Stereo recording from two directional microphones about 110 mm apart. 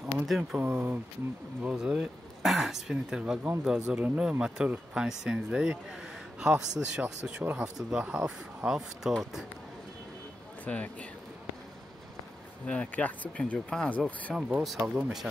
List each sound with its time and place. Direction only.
0.3 s speech: 5° right (ahead or behind)
0.6 s speech: 20° right (ahead or behind)
1.6 s speech: 10° right (ahead or behind)
10.6 s speech: 10° left (ahead or behind)
12.6 s speech: 10° left (ahead or behind)
14.3 s speech: centre (ahead or behind)